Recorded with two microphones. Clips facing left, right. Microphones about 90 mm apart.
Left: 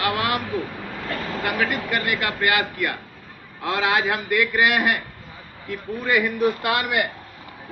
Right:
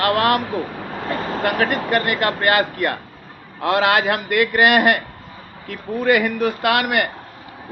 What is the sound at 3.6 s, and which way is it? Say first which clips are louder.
A man's voice: right 5 dB; 65° right (ahead or behind).